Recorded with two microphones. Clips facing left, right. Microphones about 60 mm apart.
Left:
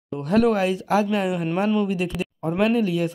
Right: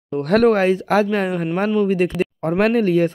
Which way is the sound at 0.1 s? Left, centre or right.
Right.